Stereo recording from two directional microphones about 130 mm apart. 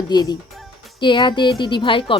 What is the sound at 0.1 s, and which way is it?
A woman's voice, 30° left (ahead or behind).